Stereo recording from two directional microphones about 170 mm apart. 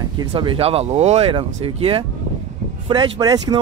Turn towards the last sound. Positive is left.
turn(degrees=-20)  # may be behind; listen again after turning